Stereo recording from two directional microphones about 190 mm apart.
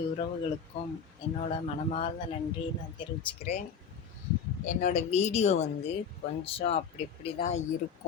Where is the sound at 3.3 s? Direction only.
35° left (ahead or behind).